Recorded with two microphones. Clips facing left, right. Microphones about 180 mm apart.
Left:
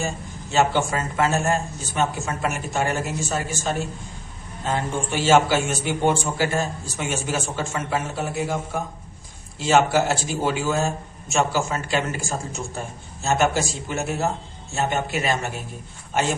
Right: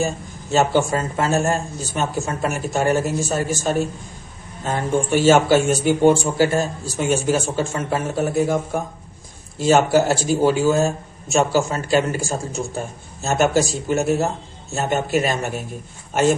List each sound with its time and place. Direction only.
0.5 s speech: 40° right (ahead or behind)